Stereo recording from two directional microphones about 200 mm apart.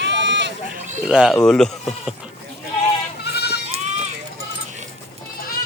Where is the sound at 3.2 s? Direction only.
55° left (ahead or behind).